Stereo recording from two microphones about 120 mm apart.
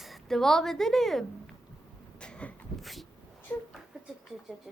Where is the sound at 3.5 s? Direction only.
15° left (ahead or behind).